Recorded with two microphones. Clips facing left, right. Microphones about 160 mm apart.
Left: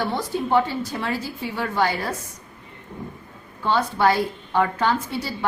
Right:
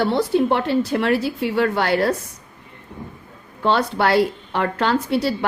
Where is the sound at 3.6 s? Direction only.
75° right (ahead or behind).